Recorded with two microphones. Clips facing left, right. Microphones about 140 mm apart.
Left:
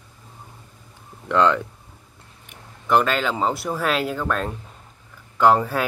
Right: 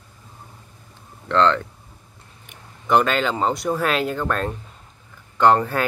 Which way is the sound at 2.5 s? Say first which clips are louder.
Right 1 dB; centre (ahead or behind).